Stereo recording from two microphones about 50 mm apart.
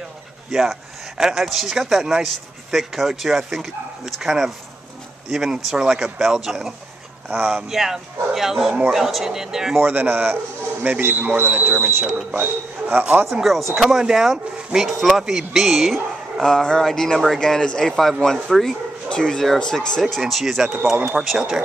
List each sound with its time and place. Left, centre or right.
0.5 s speech: centre
7.2 s speech: centre
7.7 s speech: centre
9.8 s speech: right
12.4 s a man's voice: right
13.3 s speech: centre
16.4 s a sound: centre
18.2 s speech: centre
19.0 s speech: centre